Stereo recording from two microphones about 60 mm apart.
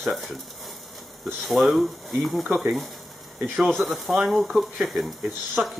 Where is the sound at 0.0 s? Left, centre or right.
Centre.